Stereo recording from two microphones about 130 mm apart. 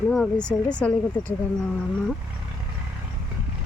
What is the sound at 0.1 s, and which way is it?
Speech, 5° left (ahead or behind).